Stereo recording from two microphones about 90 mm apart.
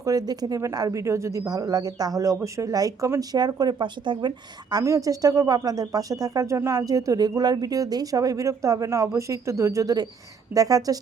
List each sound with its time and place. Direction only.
0.0 s a woman's voice: 45° right (ahead or behind); by 4.8 s 60° right (ahead or behind)
4.8 s speech: 40° right (ahead or behind)